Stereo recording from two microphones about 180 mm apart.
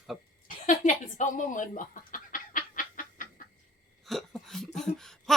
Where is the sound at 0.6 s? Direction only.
45° left (ahead or behind).